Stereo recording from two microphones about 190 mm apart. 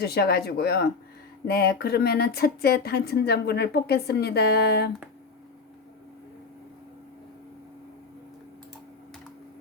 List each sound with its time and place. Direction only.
0.0 s speech: 60° left (ahead or behind)